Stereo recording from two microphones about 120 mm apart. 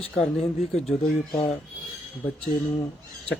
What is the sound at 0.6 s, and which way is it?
Speech, 65° left (ahead or behind).